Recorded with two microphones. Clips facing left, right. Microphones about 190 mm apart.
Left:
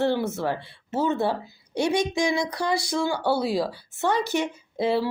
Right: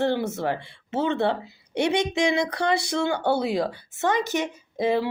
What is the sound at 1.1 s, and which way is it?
A woman's voice, 70° right (ahead or behind).